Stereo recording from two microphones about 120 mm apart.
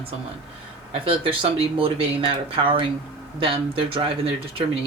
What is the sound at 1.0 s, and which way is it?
Speech, 50° right (ahead or behind).